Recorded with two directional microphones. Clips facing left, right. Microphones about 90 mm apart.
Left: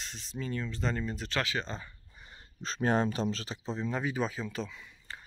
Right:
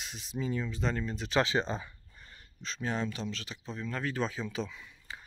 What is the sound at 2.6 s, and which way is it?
Speech, 45° left (ahead or behind).